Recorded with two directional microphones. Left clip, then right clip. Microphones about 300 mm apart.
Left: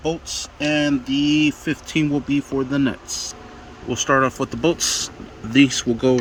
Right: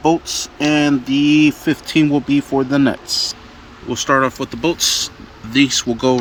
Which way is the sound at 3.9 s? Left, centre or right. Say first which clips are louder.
Right 3 dB; centre.